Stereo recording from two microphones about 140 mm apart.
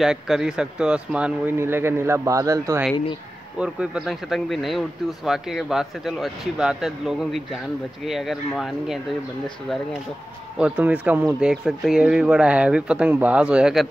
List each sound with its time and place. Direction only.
0.0 s speech: 5° right (ahead or behind); by 2.8 s 25° right (ahead or behind)
3.5 s speech: 5° right (ahead or behind)
10.6 s speech: 10° right (ahead or behind)